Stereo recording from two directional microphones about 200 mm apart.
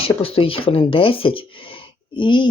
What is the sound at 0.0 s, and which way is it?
Speech, 25° left (ahead or behind).